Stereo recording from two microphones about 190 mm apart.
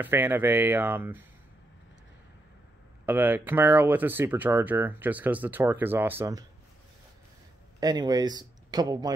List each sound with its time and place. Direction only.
0.0 s speech: 10° right (ahead or behind)
3.1 s speech: 10° right (ahead or behind)
7.8 s speech: 20° right (ahead or behind)